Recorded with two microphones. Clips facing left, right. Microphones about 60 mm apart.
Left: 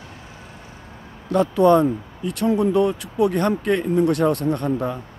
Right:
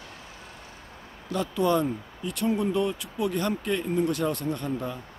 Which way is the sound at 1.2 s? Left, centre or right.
Left.